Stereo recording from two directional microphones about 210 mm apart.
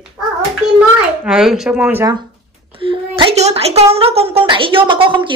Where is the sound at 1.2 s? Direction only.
5° right (ahead or behind).